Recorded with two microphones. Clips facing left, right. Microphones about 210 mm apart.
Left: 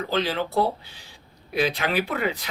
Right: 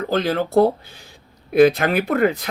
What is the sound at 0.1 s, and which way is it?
Speech, 50° right (ahead or behind).